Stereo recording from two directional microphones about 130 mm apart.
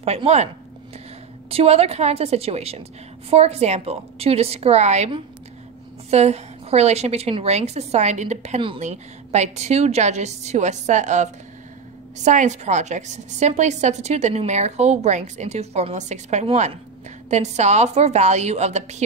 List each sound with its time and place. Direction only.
0.0 s a woman's voice: 55° right (ahead or behind)
1.5 s a woman's voice: 50° right (ahead or behind)
12.3 s a woman's voice: 65° right (ahead or behind)